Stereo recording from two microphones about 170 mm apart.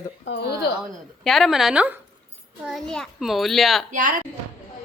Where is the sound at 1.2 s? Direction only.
Centre (ahead or behind).